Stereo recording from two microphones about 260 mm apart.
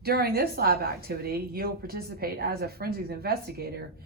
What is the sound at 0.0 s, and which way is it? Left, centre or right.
Speech, right.